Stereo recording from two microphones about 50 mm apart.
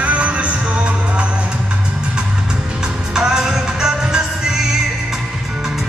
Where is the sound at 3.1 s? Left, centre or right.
Centre.